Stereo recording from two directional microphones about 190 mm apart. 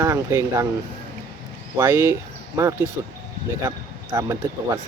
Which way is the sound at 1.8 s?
10° right (ahead or behind).